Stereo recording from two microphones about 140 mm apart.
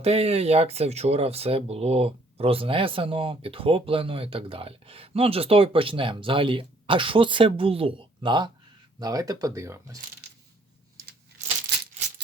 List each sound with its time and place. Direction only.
0.0 s speech: 45° right (ahead or behind); by 10.0 s 20° right (ahead or behind)